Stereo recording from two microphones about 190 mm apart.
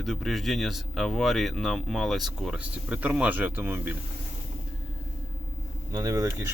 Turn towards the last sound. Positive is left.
turn(degrees=-15)  # may be behind; listen again after turning